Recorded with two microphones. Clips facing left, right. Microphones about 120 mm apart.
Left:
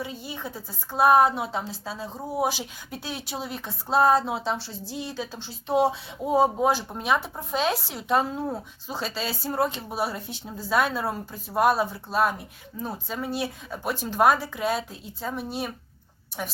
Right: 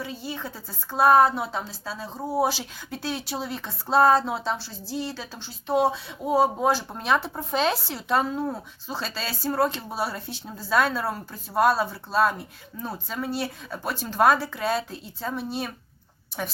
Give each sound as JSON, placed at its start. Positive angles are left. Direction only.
{"t": 0.0, "sound": "a woman's voice", "side_deg": 20}
{"t": 7.9, "sound": "speech", "side_deg": 15}